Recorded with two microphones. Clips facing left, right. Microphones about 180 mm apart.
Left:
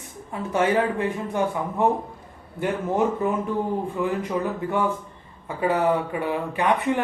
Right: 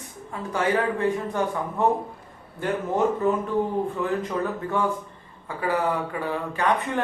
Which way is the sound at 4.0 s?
10° left (ahead or behind).